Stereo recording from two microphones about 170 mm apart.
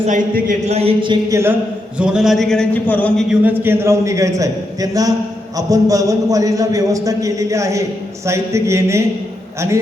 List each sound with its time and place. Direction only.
0.1 s speech: 50° right (ahead or behind)
0.7 s a sound: 35° right (ahead or behind)
2.0 s a man's voice: 5° right (ahead or behind)
3.2 s a man's voice: 10° right (ahead or behind)